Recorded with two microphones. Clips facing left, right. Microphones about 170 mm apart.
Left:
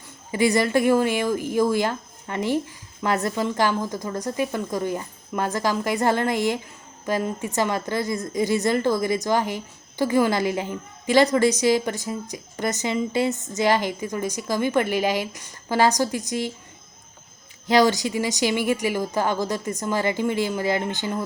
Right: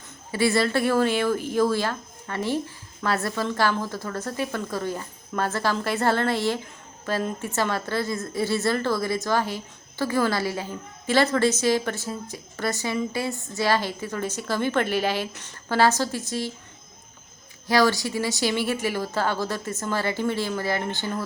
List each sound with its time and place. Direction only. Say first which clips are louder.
0.3 s a woman's voice: left 2 dB; 15° left (ahead or behind)
17.7 s a woman's voice: left 2 dB; 20° left (ahead or behind)